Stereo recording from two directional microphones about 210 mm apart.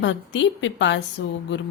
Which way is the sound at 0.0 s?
60° left (ahead or behind).